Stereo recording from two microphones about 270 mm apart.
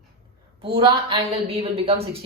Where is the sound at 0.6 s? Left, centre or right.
Centre.